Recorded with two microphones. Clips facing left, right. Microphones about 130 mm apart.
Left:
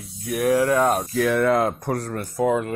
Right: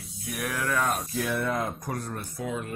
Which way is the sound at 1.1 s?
90° left.